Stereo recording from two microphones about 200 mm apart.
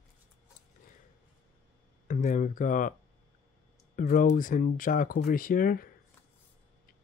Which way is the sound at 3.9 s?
40° left (ahead or behind).